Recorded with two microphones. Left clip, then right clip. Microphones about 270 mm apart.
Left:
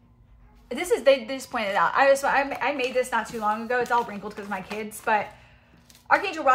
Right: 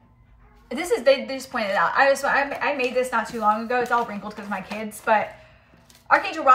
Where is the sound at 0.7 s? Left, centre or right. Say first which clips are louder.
Right 1 dB; centre.